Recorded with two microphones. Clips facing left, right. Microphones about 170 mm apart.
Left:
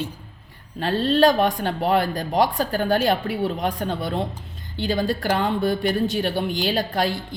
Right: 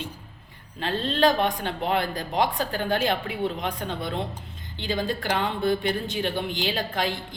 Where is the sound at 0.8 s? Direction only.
40° left (ahead or behind).